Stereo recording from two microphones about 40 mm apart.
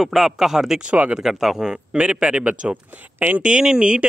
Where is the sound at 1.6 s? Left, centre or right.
Right.